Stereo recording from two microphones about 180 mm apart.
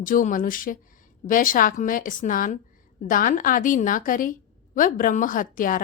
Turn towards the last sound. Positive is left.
turn(degrees=50)  # may be behind; listen again after turning